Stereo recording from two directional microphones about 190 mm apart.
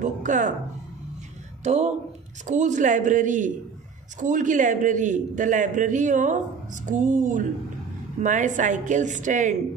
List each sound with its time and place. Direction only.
0.0 s speech: 40° right (ahead or behind)
1.6 s a man's voice: 35° right (ahead or behind)